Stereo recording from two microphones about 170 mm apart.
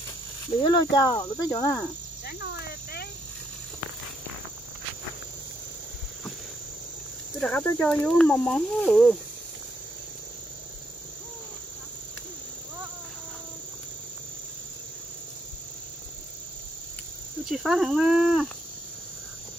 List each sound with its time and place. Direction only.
0.6 s speech: 25° left (ahead or behind)
2.2 s cricket: 70° left (ahead or behind)
7.3 s speech: 10° left (ahead or behind)
17.5 s speech: centre (ahead or behind)